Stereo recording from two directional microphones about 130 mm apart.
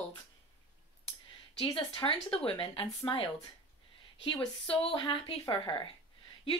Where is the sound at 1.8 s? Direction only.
40° left (ahead or behind).